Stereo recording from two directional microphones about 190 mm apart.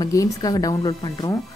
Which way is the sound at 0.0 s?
20° left (ahead or behind).